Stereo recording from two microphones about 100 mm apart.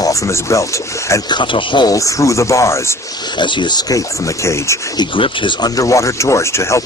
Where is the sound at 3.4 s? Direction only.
50° left (ahead or behind); by 6.8 s 30° left (ahead or behind).